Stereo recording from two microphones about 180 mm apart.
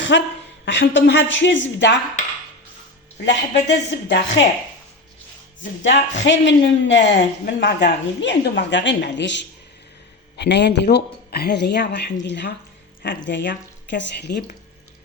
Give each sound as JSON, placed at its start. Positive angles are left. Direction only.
{"t": 0.1, "sound": "speech", "side_deg": 80}
{"t": 3.2, "sound": "speech", "side_deg": 75}
{"t": 5.8, "sound": "speech", "side_deg": 85}